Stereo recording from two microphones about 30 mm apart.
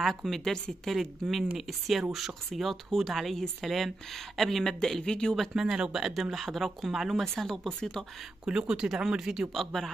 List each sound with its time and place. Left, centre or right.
0.0 s a woman's voice: centre
0.9 s speech: centre
5.0 s speech: left
5.5 s speech: centre
6.3 s speech: centre
7.2 s a woman's voice: centre
8.5 s speech: right
9.5 s a woman's voice: centre